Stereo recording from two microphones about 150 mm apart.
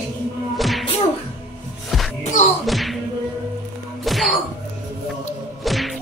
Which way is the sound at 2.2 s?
55° left (ahead or behind).